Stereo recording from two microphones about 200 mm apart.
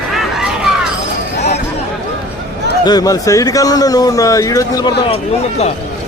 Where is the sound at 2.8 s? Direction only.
20° left (ahead or behind).